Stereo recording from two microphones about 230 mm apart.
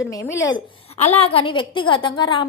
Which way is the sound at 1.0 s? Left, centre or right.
Left.